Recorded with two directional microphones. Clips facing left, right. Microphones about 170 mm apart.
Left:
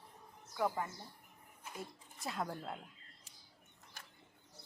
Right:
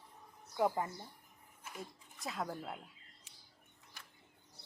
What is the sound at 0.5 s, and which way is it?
Speech, 20° right (ahead or behind).